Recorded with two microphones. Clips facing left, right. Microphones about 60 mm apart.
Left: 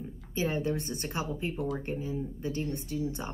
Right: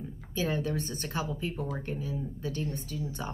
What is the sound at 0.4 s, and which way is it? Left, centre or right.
Speech, left.